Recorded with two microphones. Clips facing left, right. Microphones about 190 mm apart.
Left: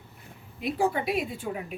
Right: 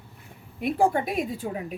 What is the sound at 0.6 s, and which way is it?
Speech, 55° right (ahead or behind).